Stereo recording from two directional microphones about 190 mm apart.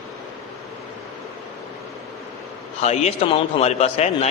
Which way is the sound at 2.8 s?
35° left (ahead or behind).